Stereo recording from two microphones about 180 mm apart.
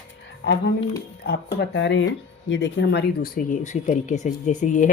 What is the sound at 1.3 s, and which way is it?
Speech, 70° left (ahead or behind).